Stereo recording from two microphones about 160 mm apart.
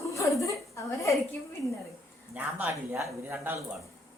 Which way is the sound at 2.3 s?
10° right (ahead or behind).